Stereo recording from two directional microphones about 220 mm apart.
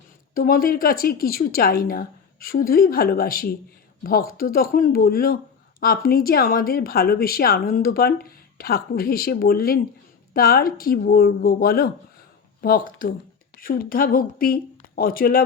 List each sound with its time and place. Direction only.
0.3 s speech: 40° left (ahead or behind)